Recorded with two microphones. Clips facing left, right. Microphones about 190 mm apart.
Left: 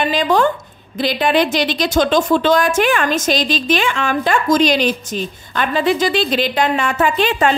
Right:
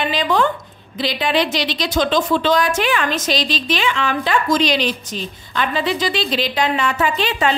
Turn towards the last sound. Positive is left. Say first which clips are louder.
# left 3 dB
turn(degrees=50)  # may be behind; listen again after turning